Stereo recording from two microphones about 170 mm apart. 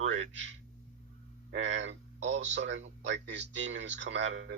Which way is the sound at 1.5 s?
90° right.